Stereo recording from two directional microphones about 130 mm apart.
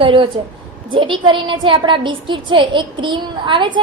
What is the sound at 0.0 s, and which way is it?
A woman's voice, 40° right (ahead or behind).